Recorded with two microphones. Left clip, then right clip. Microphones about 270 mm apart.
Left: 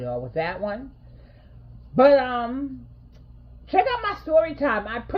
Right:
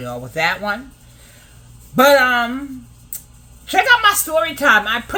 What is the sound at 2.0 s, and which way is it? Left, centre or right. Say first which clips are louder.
Speech: right 4 dB; centre.